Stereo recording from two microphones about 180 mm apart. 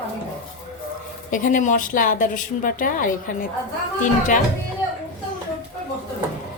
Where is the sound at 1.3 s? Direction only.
45° left (ahead or behind).